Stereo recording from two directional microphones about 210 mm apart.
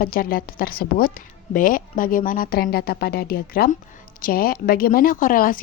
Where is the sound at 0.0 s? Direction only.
45° left (ahead or behind).